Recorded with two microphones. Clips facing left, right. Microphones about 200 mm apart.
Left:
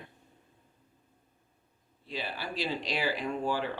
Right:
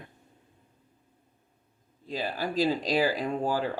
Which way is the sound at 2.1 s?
40° right (ahead or behind).